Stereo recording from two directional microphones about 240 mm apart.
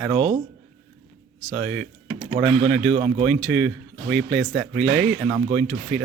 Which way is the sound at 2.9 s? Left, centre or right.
Right.